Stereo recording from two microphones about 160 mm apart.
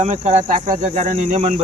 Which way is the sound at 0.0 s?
45° right (ahead or behind).